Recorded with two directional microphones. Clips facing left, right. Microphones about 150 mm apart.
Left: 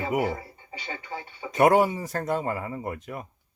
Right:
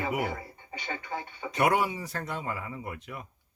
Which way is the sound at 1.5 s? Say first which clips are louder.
Left 7 dB; 45° left (ahead or behind).